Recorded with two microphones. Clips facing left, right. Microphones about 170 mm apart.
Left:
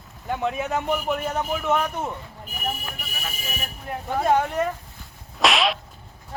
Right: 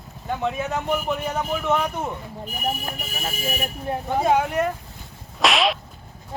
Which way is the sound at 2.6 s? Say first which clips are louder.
Right 3 dB; 35° right (ahead or behind).